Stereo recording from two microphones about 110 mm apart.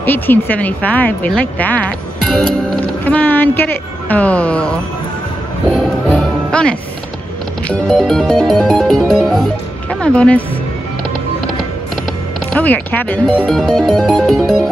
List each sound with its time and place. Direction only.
0.0 s speech: 15° left (ahead or behind)
3.2 s speech: 15° left (ahead or behind)
6.0 s music: 10° left (ahead or behind)
12.5 s speech: 15° left (ahead or behind)
13.5 s music: 5° left (ahead or behind)